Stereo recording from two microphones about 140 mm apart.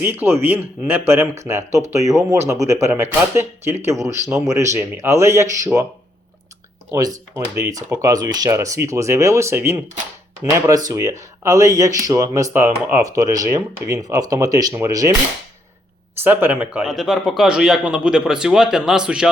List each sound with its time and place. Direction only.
0.0 s speech: 15° right (ahead or behind)
6.9 s speech: 25° right (ahead or behind)
10.8 s speech: 25° right (ahead or behind)
16.2 s a man's voice: 15° right (ahead or behind)